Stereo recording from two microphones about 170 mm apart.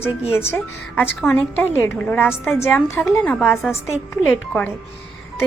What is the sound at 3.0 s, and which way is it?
A woman's voice, centre (ahead or behind).